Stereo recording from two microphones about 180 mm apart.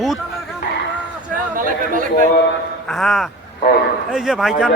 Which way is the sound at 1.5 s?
50° right (ahead or behind).